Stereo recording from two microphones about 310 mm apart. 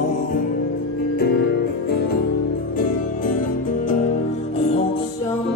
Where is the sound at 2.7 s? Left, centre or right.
Left.